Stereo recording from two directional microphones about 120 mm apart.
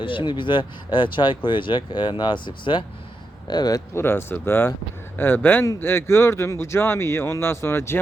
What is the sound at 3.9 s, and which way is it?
Speech, 20° left (ahead or behind).